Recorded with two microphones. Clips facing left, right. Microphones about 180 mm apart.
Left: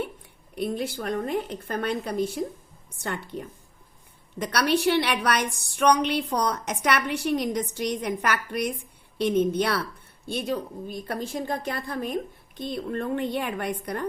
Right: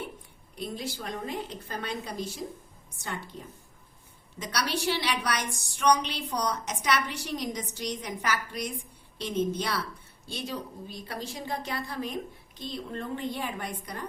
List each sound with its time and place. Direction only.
0.5 s a woman's voice: 60° left (ahead or behind)